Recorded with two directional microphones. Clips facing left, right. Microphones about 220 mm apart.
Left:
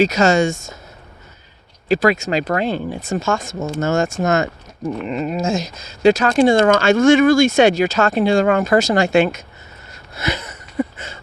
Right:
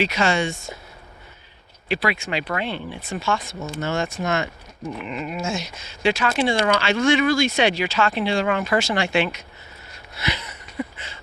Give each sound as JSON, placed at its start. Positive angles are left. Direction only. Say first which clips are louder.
{"t": 0.0, "sound": "speech", "louder": "left 7 dB", "side_deg": 40}
{"t": 1.9, "sound": "speech", "louder": "left 8 dB", "side_deg": 45}
{"t": 10.2, "sound": "a sound", "louder": "left 5 dB", "side_deg": 45}